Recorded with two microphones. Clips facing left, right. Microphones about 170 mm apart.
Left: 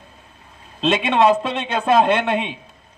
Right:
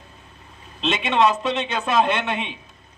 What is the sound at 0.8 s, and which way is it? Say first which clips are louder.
A man's voice: left 3 dB; 55° left (ahead or behind).